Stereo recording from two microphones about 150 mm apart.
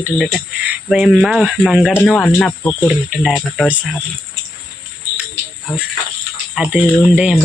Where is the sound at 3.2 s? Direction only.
5° right (ahead or behind).